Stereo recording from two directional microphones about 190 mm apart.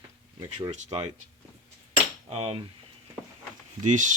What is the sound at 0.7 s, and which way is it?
Speech, 35° right (ahead or behind).